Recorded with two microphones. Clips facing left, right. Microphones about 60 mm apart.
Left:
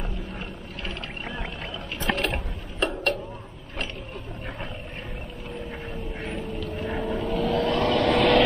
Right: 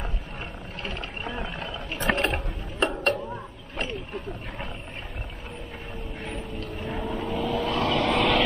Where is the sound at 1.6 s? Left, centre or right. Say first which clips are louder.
Right 2 dB; right.